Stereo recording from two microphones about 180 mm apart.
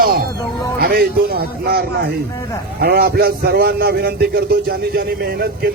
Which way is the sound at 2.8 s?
60° right (ahead or behind).